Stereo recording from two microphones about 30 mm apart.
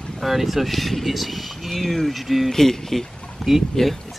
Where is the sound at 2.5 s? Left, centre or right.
Centre.